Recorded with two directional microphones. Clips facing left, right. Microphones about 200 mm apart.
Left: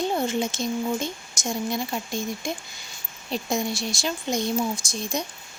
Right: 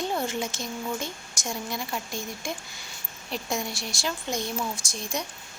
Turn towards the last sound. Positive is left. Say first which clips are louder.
# left 4 dB
turn(degrees=20)  # may be behind; listen again after turning